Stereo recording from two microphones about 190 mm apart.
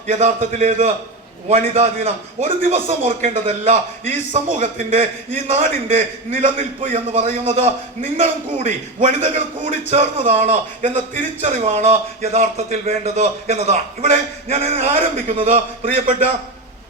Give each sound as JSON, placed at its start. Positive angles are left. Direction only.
{"t": 0.1, "sound": "a man's voice", "side_deg": -35}